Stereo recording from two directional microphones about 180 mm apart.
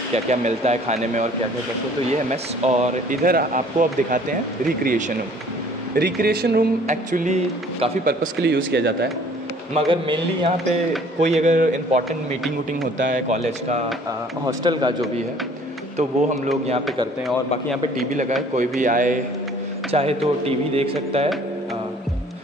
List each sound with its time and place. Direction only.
0.1 s speech: 40° right (ahead or behind)
2.6 s speech: 40° right (ahead or behind)
5.9 s speech: 65° right (ahead or behind)
6.9 s speech: 45° right (ahead or behind)
8.0 s speech: 55° right (ahead or behind)
8.5 s speech: 75° right (ahead or behind)
9.8 s a man's voice: 30° right (ahead or behind)
11.1 s speech: 40° right (ahead or behind)
13.0 s speech: 45° right (ahead or behind)
14.4 s a man's voice: 25° right (ahead or behind)
16.0 s speech: 35° right (ahead or behind)
18.5 s speech: 45° right (ahead or behind)
19.9 s speech: 35° right (ahead or behind)